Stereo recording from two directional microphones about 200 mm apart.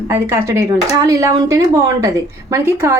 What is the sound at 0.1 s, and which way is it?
Speech, 15° right (ahead or behind).